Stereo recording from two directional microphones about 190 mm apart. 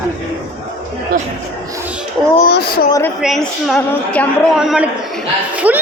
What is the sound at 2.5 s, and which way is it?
Speech, 55° left (ahead or behind).